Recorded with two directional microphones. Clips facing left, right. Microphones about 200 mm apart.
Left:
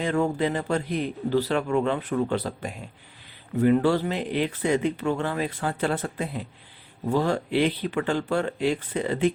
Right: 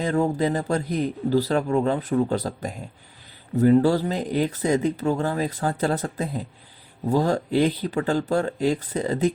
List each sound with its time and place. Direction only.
0.0 s speech: 40° right (ahead or behind)